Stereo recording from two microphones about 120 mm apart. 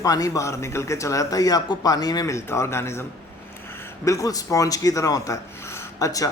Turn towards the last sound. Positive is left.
turn(degrees=30)  # may be behind; listen again after turning